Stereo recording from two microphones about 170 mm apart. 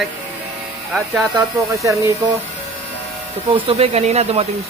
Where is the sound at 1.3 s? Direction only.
20° right (ahead or behind).